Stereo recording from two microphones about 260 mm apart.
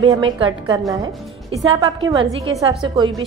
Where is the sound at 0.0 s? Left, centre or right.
Centre.